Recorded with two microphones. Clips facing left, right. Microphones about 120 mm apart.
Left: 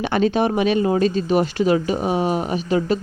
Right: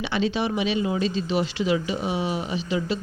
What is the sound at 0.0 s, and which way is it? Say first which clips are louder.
Speech: left 6 dB; 50° left (ahead or behind).